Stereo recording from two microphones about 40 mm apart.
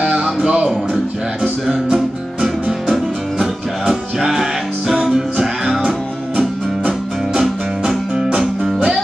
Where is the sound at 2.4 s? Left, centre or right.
Centre.